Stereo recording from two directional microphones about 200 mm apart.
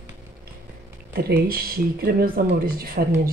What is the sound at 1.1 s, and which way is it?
Speech, 50° right (ahead or behind).